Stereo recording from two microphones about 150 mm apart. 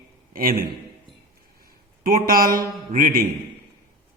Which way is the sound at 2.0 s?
70° right (ahead or behind).